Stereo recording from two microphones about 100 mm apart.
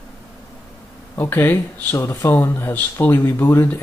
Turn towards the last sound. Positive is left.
turn(degrees=20)  # may be behind; listen again after turning